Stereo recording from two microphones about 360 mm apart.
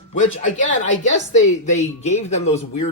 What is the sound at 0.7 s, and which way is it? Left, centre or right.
A woman's voice, centre.